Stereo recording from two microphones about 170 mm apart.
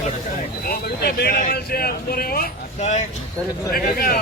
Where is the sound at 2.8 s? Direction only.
40° left (ahead or behind).